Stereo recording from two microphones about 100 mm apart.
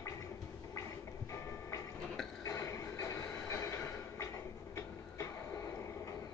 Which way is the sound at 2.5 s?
30° left (ahead or behind).